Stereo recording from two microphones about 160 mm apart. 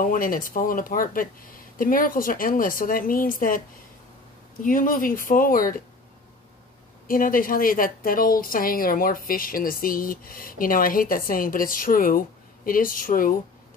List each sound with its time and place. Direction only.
0.0 s a woman's voice: 60° left (ahead or behind)
4.6 s a woman's voice: 60° left (ahead or behind)
7.1 s a woman's voice: 60° left (ahead or behind)